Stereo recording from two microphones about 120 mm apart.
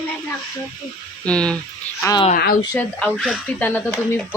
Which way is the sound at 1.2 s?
10° left (ahead or behind).